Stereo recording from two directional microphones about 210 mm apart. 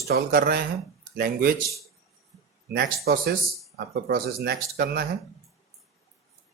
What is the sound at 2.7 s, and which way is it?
Speech, 50° right (ahead or behind).